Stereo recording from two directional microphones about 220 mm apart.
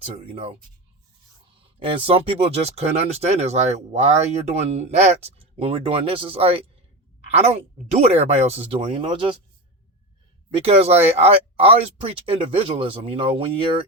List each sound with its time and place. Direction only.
1.8 s speech: 25° right (ahead or behind)
10.6 s speech: 25° right (ahead or behind)